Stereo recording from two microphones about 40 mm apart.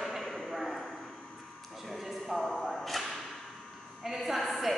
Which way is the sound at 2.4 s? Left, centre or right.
Centre.